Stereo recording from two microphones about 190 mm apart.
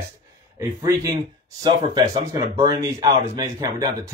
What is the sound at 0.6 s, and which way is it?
Speech, 20° right (ahead or behind).